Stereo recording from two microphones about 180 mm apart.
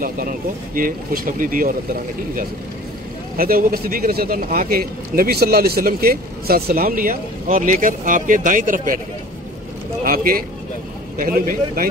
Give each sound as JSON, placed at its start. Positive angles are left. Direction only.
{"t": 0.0, "sound": "speech", "side_deg": -50}
{"t": 3.3, "sound": "speech", "side_deg": -55}
{"t": 10.0, "sound": "speech", "side_deg": -55}